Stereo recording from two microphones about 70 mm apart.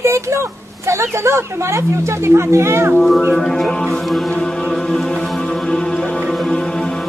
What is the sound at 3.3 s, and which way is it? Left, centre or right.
Music, centre.